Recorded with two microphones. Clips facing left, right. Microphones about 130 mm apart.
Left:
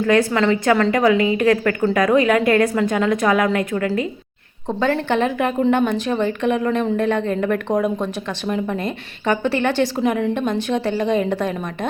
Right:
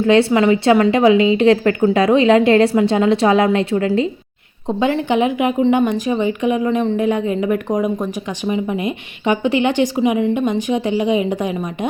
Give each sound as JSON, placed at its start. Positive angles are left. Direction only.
{"t": 0.0, "sound": "a woman's voice", "side_deg": -25}
{"t": 4.8, "sound": "a woman's voice", "side_deg": -15}
{"t": 10.0, "sound": "a woman's voice", "side_deg": -5}